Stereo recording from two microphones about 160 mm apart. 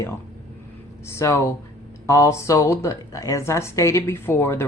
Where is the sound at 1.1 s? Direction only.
15° left (ahead or behind).